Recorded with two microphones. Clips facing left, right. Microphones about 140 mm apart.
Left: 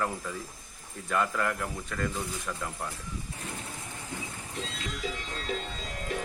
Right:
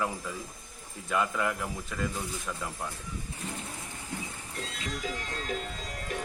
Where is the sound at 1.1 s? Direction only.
5° right (ahead or behind).